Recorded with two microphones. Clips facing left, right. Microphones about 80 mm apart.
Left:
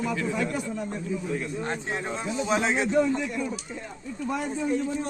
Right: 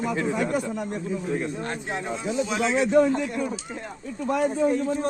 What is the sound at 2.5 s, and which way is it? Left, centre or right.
Speech, left.